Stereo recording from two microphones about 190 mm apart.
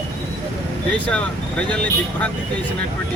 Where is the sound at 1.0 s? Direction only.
5° left (ahead or behind).